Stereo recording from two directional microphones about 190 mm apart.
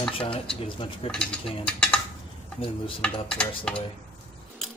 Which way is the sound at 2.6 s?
30° left (ahead or behind).